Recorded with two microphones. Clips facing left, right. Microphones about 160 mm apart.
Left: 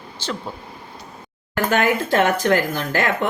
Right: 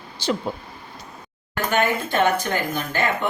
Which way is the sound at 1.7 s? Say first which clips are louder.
Left 3 dB; 90° left.